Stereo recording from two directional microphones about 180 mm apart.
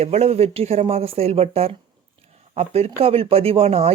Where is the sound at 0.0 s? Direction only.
35° right (ahead or behind).